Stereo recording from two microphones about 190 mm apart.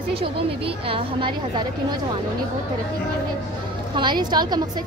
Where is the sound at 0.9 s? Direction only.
25° right (ahead or behind).